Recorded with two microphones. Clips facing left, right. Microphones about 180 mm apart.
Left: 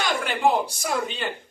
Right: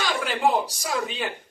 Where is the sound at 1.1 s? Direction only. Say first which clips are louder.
Even; centre (ahead or behind).